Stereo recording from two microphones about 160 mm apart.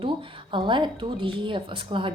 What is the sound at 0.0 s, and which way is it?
Speech, 30° right (ahead or behind).